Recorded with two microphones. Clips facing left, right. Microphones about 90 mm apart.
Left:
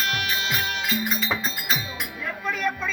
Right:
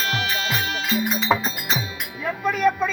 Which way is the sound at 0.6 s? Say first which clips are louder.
Right 3 dB; 25° right (ahead or behind).